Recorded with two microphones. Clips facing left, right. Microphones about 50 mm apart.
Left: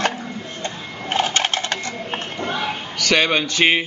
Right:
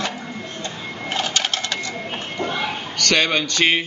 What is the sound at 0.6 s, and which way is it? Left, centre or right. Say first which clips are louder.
Sewing machine: even; left.